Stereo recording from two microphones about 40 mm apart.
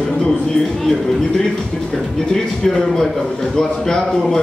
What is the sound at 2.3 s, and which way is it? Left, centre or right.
A man's voice, centre.